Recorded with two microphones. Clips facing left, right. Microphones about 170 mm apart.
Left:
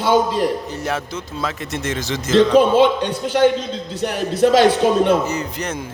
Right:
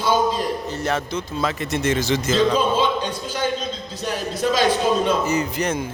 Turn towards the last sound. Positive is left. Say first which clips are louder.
# right 3 dB
turn(degrees=0)  # may be behind; listen again after turning